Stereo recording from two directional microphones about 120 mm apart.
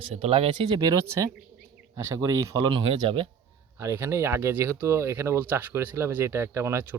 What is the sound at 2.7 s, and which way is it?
Speech, 50° right (ahead or behind).